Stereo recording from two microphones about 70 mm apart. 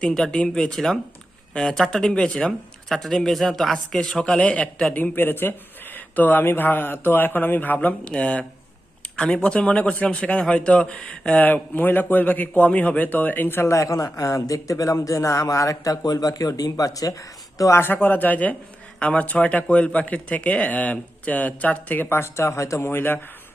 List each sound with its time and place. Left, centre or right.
0.0 s a man's voice: centre
2.9 s a man's voice: centre
5.1 s a man's voice: left; by 11.2 s centre
11.3 s a man's voice: left
22.1 s speech: left